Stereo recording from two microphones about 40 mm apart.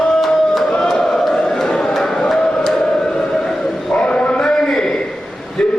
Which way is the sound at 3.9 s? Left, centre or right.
Left.